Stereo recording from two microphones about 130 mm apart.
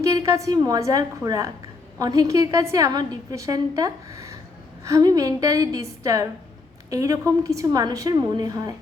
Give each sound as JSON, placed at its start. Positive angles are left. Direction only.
{"t": 0.0, "sound": "a woman's voice", "side_deg": -25}